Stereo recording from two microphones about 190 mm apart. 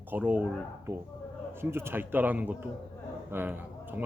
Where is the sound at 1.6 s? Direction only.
10° right (ahead or behind).